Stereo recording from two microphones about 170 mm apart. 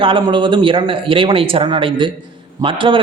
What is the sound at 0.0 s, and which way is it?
A man's voice, 30° right (ahead or behind).